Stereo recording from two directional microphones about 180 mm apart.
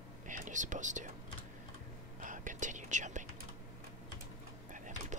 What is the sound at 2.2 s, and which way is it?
Whispering, 45° right (ahead or behind).